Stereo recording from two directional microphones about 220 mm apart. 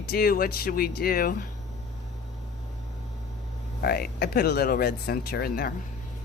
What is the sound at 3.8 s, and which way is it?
Speech, 45° left (ahead or behind).